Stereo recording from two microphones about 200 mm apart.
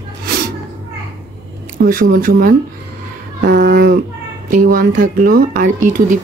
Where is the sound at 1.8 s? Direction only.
45° right (ahead or behind).